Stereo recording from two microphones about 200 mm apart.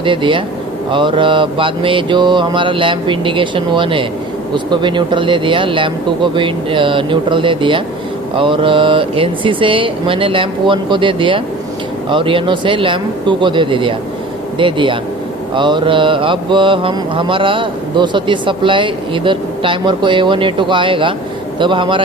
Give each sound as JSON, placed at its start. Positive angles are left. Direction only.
{"t": 0.0, "sound": "mantra", "side_deg": -25}